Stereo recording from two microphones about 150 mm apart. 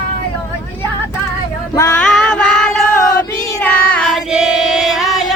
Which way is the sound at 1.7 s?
20° left (ahead or behind).